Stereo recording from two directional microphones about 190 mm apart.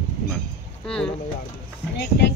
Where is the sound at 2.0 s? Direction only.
60° left (ahead or behind).